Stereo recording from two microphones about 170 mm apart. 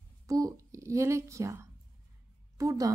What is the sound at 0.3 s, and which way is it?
A child's voice, 20° right (ahead or behind).